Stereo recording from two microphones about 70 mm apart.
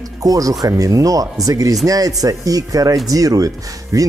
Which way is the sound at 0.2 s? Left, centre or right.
Right.